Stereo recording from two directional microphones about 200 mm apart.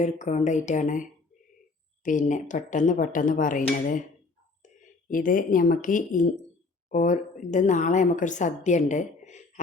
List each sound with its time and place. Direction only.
0.0 s a woman's voice: 35° left (ahead or behind)
2.0 s a woman's voice: 40° left (ahead or behind)
4.6 s a woman's voice: 40° left (ahead or behind)